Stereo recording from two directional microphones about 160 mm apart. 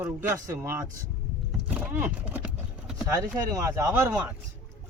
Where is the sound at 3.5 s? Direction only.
20° right (ahead or behind).